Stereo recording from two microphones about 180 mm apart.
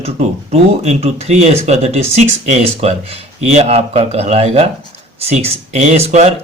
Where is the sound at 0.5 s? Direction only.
35° right (ahead or behind).